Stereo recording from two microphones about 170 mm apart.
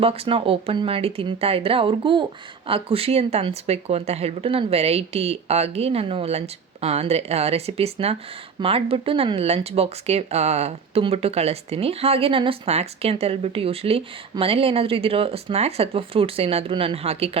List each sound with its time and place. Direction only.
0.0 s speech: 35° right (ahead or behind)